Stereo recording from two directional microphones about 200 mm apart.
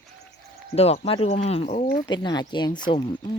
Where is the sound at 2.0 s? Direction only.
20° left (ahead or behind).